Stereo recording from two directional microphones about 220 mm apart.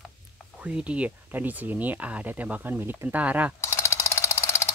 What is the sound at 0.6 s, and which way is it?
Speech, 5° right (ahead or behind).